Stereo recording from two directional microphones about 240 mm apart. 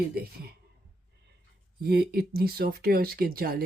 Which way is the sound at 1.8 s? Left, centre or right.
Right.